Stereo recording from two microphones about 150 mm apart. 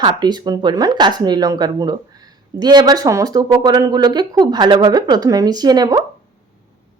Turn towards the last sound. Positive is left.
turn(degrees=-25)  # may be behind; listen again after turning